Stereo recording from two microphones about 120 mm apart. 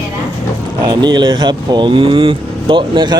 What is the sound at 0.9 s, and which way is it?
Speech, 35° right (ahead or behind).